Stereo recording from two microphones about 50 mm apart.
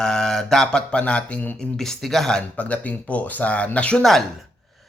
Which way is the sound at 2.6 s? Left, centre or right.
Left.